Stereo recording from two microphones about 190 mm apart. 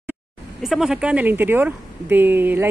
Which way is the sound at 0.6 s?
Centre (ahead or behind).